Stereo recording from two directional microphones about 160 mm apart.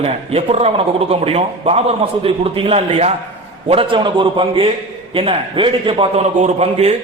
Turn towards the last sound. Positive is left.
turn(degrees=-40)  # may be behind; listen again after turning